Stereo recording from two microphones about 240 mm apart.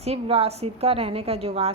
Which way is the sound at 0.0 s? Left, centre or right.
Right.